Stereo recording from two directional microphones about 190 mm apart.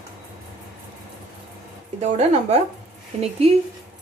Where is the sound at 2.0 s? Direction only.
35° right (ahead or behind).